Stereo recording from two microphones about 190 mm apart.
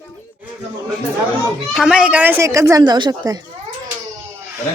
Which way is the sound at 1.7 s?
Centre (ahead or behind).